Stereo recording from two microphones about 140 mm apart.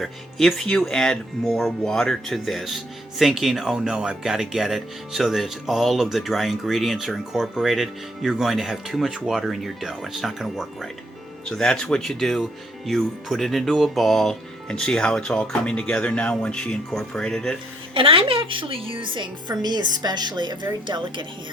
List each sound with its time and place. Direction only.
0.0 s speech: centre (ahead or behind)
17.9 s a woman's voice: 40° right (ahead or behind)